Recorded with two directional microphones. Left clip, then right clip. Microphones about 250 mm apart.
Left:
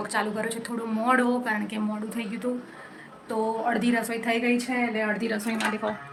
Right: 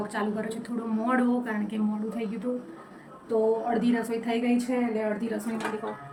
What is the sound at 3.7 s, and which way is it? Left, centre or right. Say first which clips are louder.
Speech: left 2 dB; centre.